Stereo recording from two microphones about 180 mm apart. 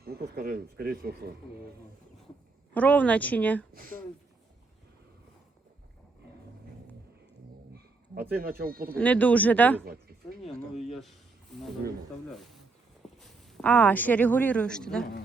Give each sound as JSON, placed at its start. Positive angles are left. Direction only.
{"t": 0.0, "sound": "speech", "side_deg": -55}
{"t": 2.7, "sound": "a woman's voice", "side_deg": 10}
{"t": 8.4, "sound": "speech", "side_deg": -55}
{"t": 9.0, "sound": "a woman's voice", "side_deg": 10}
{"t": 9.8, "sound": "speech", "side_deg": -55}
{"t": 10.4, "sound": "speech", "side_deg": 0}
{"t": 13.0, "sound": "walk", "side_deg": 0}
{"t": 13.5, "sound": "a woman's voice", "side_deg": 5}